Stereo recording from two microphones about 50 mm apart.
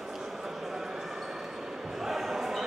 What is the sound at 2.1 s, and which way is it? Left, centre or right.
Basketball bounce, centre.